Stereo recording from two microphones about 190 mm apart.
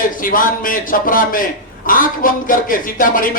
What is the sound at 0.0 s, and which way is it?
Speech, 45° left (ahead or behind).